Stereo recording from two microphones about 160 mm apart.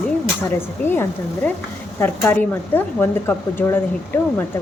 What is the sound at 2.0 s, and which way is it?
A woman's voice, 15° left (ahead or behind).